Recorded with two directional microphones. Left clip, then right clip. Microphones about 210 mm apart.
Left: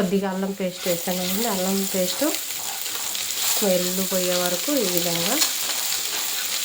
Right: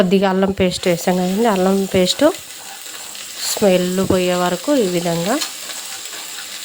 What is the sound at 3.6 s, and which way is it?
Speech, 50° right (ahead or behind).